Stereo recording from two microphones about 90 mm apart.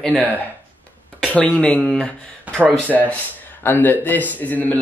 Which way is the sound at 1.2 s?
15° left (ahead or behind).